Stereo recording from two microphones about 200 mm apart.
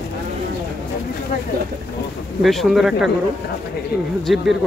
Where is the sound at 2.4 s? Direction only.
Centre (ahead or behind).